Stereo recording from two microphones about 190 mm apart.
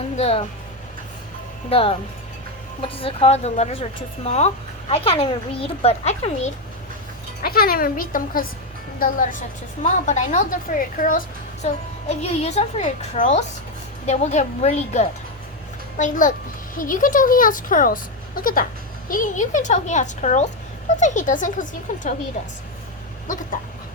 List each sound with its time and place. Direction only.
0.2 s a woman's voice: 30° left (ahead or behind)
1.7 s a woman's voice: 30° left (ahead or behind)
7.4 s a woman's voice: 50° left (ahead or behind)
23.2 s speech: 40° left (ahead or behind)